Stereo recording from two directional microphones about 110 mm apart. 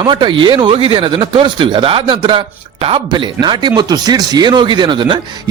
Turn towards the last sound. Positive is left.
turn(degrees=-45)  # may be behind; listen again after turning